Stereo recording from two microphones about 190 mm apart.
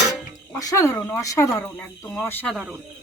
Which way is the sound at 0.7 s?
15° left (ahead or behind).